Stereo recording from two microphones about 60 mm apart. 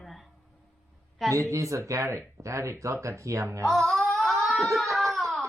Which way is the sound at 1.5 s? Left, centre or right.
Right.